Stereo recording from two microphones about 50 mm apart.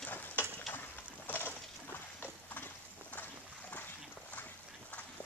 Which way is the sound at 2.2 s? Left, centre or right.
Left.